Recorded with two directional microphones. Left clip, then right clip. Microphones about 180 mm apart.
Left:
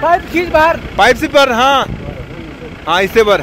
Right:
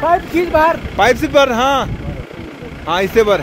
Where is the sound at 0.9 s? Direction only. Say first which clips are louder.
Left 3 dB; centre (ahead or behind).